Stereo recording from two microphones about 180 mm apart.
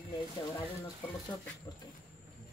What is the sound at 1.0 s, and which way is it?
Speech, 10° left (ahead or behind).